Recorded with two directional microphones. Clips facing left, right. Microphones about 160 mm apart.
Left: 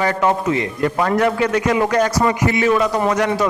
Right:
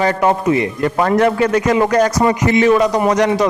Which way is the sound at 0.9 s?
35° right (ahead or behind).